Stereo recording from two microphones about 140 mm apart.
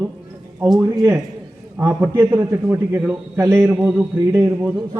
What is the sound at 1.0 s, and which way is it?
A man's voice, 15° right (ahead or behind).